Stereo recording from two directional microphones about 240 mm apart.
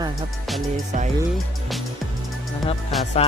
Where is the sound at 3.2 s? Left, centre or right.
Left.